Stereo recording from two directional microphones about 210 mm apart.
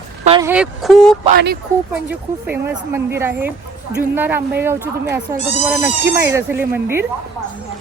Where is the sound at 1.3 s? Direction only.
50° right (ahead or behind).